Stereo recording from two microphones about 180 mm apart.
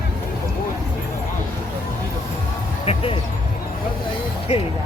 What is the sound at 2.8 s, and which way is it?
Music, 35° left (ahead or behind).